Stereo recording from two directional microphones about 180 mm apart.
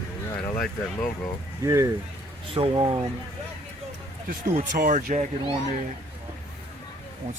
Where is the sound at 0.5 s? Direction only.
10° left (ahead or behind).